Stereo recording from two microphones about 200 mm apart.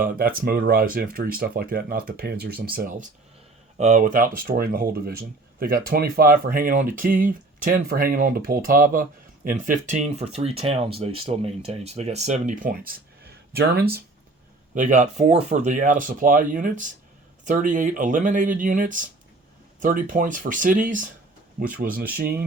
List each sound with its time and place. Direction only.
0.0 s speech: 45° right (ahead or behind)
14.8 s speech: 40° right (ahead or behind)